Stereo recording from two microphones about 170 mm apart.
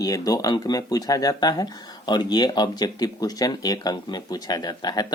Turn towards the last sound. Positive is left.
turn(degrees=25)  # may be behind; listen again after turning